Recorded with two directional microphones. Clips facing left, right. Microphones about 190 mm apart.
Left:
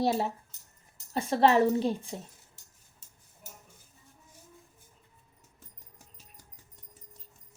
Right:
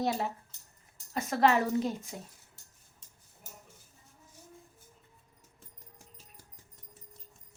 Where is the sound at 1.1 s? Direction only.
30° left (ahead or behind).